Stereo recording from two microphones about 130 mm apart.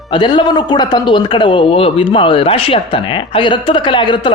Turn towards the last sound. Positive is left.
turn(degrees=35)  # may be behind; listen again after turning